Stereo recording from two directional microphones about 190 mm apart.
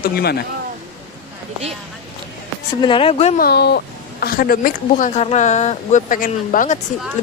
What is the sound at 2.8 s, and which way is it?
Speech, 25° left (ahead or behind).